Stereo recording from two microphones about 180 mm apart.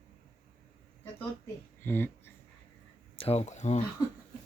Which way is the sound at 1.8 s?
10° left (ahead or behind).